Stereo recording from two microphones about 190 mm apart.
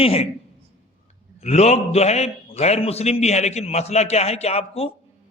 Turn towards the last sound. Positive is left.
turn(degrees=30)  # may be behind; listen again after turning